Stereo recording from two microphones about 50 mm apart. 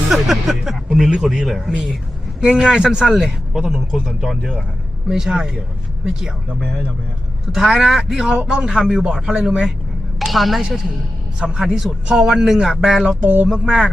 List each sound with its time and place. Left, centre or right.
0.1 s a man's voice: centre
1.5 s speech: centre
2.5 s a man's voice: centre
6.6 s speech: centre
7.5 s a man's voice: centre
10.2 s speech: centre
11.3 s a man's voice: centre
13.2 s speech: right
13.5 s a man's voice: centre